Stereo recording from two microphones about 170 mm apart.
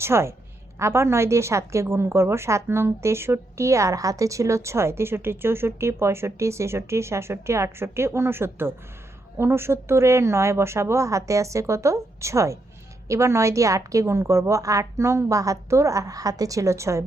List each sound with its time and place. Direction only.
0.0 s a woman's voice: 15° right (ahead or behind)